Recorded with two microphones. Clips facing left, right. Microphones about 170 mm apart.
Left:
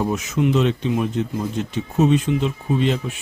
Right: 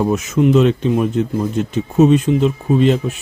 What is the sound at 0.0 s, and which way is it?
Speech, 50° right (ahead or behind).